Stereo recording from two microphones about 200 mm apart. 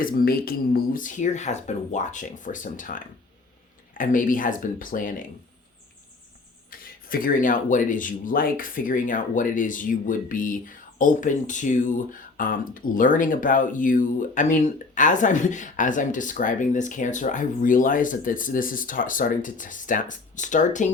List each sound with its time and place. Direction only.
0.0 s speech: 45° left (ahead or behind)
6.7 s speech: 45° left (ahead or behind)